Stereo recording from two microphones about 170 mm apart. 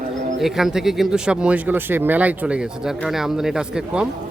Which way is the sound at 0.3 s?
Centre (ahead or behind).